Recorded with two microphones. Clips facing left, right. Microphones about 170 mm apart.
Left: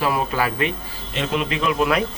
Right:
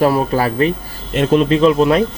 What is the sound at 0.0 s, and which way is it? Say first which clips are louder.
A man's voice: right 7 dB; 35° right (ahead or behind).